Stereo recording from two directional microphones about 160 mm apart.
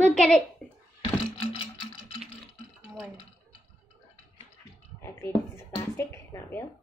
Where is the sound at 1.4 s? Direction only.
30° left (ahead or behind).